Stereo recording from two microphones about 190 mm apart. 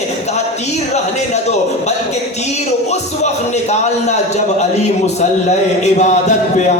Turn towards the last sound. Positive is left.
turn(degrees=40)  # may be behind; listen again after turning